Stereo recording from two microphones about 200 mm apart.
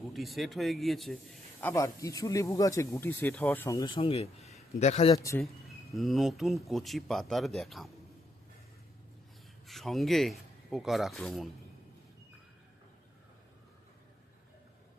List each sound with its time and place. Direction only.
0.1 s speech: centre (ahead or behind)
1.6 s speech: 15° left (ahead or behind); by 5.1 s 35° left (ahead or behind)
5.1 s speech: 15° left (ahead or behind)
5.9 s speech: centre (ahead or behind)
9.6 s speech: centre (ahead or behind)